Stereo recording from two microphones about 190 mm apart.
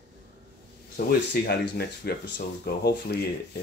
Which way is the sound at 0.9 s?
55° left (ahead or behind).